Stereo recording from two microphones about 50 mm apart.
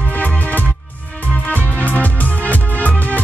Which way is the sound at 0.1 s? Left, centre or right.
Left.